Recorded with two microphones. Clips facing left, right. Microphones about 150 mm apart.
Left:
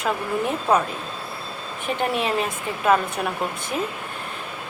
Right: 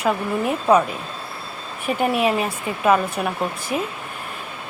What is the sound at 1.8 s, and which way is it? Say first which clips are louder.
Speech: right 4 dB; 10° right (ahead or behind).